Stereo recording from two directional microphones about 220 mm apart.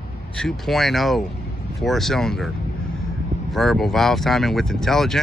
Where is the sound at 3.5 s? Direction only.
Centre (ahead or behind).